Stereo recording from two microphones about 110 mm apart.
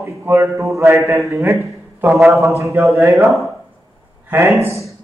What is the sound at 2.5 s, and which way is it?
Speech, 25° right (ahead or behind).